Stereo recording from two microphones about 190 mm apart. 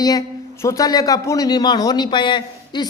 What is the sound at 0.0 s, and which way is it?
A man's voice, 20° left (ahead or behind).